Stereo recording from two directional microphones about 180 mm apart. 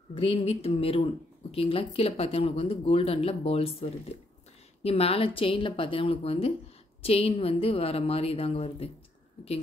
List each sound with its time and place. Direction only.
0.1 s speech: 30° left (ahead or behind)